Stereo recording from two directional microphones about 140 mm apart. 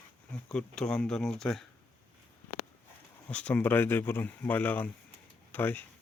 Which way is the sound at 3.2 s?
10° left (ahead or behind).